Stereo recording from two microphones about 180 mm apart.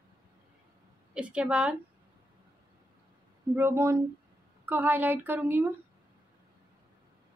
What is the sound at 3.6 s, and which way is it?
A woman's voice, 15° right (ahead or behind).